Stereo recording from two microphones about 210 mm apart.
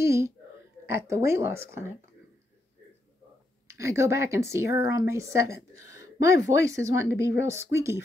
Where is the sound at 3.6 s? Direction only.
15° right (ahead or behind).